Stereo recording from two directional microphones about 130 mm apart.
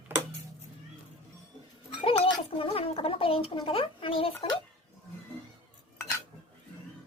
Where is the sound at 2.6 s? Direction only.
50° left (ahead or behind).